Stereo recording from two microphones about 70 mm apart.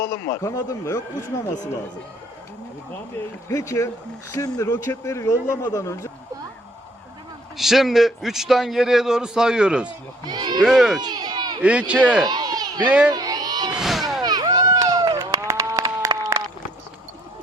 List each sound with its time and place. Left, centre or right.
0.3 s speech: left
3.5 s speech: left
7.5 s a man's voice: centre
10.2 s speech: right
10.6 s speech: centre
11.0 s a sound: right
11.6 s speech: centre
12.2 s a sound: right
13.7 s a sound: centre
14.2 s run: right
15.1 s run: right
15.8 s applause: right